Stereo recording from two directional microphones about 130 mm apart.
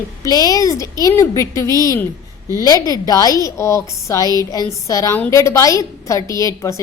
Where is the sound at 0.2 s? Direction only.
30° left (ahead or behind).